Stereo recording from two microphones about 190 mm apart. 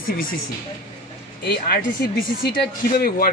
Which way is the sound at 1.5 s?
50° left (ahead or behind).